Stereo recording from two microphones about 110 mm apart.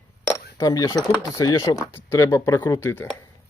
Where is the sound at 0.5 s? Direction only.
35° left (ahead or behind).